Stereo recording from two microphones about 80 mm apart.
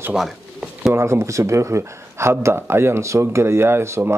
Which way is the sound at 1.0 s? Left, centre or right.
Right.